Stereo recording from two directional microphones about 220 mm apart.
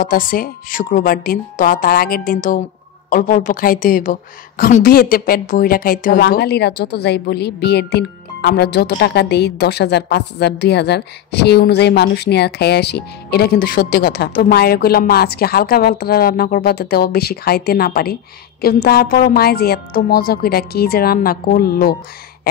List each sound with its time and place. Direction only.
0.0 s a woman's voice: 40° left (ahead or behind)